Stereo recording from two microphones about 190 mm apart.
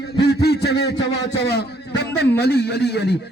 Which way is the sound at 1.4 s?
60° left (ahead or behind).